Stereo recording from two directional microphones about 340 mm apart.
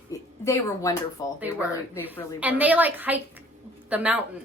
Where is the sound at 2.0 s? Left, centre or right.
Centre.